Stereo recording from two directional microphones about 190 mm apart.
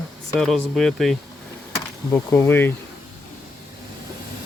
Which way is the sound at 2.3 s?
10° left (ahead or behind).